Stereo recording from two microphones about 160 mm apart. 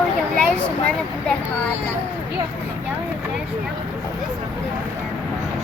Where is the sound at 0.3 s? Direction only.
5° left (ahead or behind).